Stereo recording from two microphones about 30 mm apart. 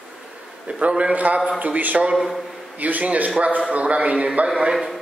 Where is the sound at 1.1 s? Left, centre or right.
Right.